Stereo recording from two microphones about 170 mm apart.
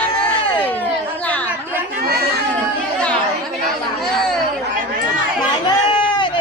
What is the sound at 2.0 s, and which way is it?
Chatter, 65° right (ahead or behind).